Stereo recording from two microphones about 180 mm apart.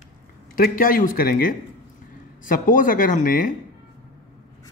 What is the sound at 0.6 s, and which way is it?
A man's voice, 50° left (ahead or behind).